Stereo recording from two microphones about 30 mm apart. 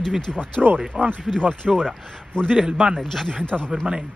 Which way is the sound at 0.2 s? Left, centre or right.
Left.